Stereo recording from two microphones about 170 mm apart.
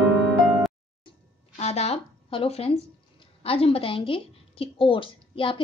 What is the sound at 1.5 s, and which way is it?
A woman's voice, 40° left (ahead or behind).